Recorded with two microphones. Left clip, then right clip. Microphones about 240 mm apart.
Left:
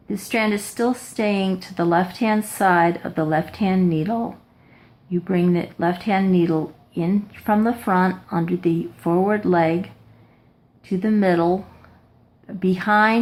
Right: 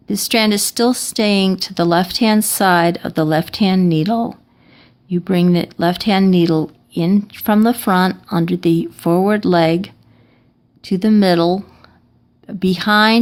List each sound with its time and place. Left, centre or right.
0.1 s speech: right
1.5 s speech: right
1.7 s speech: right
4.0 s speech: right
5.0 s speech: right
10.8 s speech: right
11.2 s speech: right
12.9 s speech: right